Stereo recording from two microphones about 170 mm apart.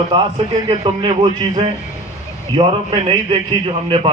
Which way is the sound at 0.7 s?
30° right (ahead or behind).